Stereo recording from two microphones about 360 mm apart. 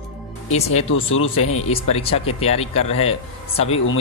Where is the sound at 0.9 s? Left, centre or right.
Left.